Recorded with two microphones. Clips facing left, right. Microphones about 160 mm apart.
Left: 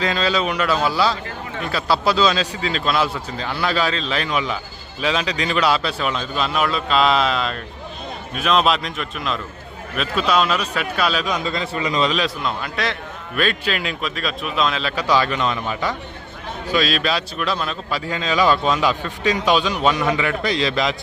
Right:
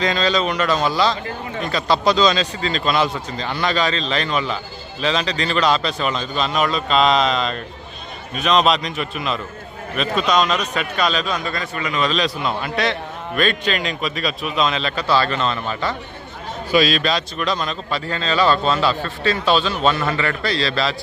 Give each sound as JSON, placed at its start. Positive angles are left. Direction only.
{"t": 0.0, "sound": "a man's voice", "side_deg": 5}
{"t": 11.3, "sound": "a man's voice", "side_deg": 20}
{"t": 12.0, "sound": "a man's voice", "side_deg": 10}
{"t": 12.4, "sound": "a man's voice", "side_deg": -5}
{"t": 16.7, "sound": "a man's voice", "side_deg": 0}